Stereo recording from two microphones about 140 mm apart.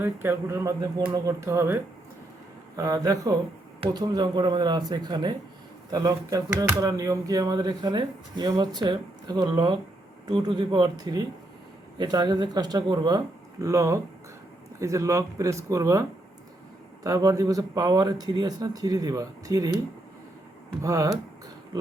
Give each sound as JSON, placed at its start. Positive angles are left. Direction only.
{"t": 0.0, "sound": "speech", "side_deg": -15}
{"t": 20.8, "sound": "speech", "side_deg": -25}